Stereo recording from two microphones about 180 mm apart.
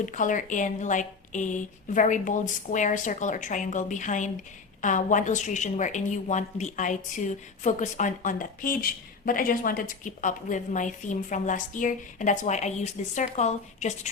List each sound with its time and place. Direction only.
0.0 s a woman's voice: 45° left (ahead or behind)